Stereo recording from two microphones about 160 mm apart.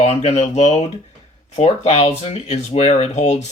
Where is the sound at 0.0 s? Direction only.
45° left (ahead or behind).